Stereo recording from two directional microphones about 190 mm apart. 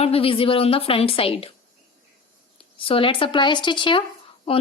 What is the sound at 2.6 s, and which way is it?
A woman's voice, 30° left (ahead or behind).